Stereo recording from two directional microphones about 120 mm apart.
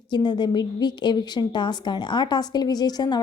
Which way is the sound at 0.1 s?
35° left (ahead or behind).